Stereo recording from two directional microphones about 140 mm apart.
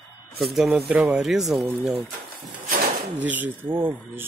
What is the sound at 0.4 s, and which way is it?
Speech, centre (ahead or behind).